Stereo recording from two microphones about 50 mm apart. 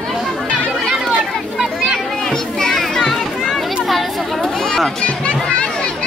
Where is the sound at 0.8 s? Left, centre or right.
Centre.